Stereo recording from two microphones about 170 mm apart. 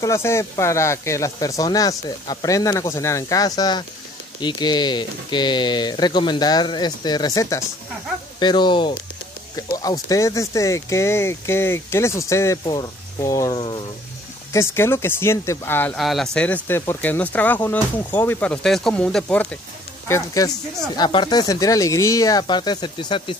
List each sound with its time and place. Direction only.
0.0 s speech: 15° left (ahead or behind)
14.5 s speech: 15° left (ahead or behind)
16.0 s speech: centre (ahead or behind)
20.1 s speech: 20° left (ahead or behind)